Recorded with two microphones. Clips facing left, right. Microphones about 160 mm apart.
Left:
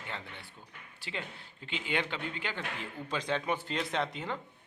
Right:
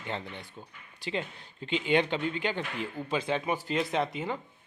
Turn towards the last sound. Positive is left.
turn(degrees=-5)  # may be behind; listen again after turning